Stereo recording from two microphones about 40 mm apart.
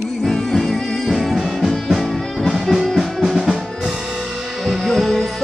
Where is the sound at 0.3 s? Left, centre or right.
Centre.